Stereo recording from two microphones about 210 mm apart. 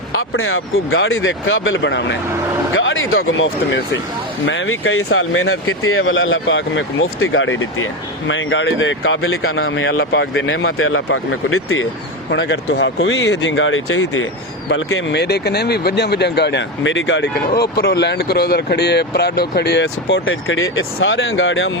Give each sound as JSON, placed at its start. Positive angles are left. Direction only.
{"t": 0.1, "sound": "speech", "side_deg": 75}
{"t": 2.7, "sound": "speech", "side_deg": 70}
{"t": 12.3, "sound": "speech", "side_deg": 55}
{"t": 14.7, "sound": "speech", "side_deg": 65}
{"t": 17.5, "sound": "speech", "side_deg": 50}